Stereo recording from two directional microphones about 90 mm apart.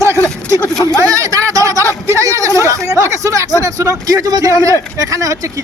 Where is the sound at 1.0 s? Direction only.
40° right (ahead or behind).